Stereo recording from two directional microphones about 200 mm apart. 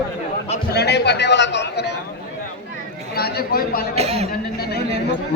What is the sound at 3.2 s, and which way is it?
Speech, 50° left (ahead or behind).